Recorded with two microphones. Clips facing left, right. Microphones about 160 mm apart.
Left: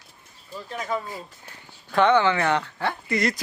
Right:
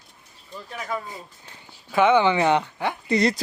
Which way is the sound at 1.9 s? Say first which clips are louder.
Right 1 dB; 10° right (ahead or behind).